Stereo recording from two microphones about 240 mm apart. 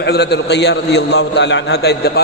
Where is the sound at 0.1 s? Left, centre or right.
Left.